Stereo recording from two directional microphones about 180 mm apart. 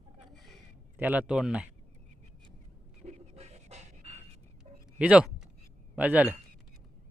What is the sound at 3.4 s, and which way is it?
Pant, 35° right (ahead or behind).